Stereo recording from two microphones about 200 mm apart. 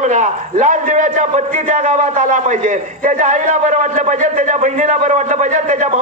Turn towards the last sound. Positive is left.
turn(degrees=-40)  # may be behind; listen again after turning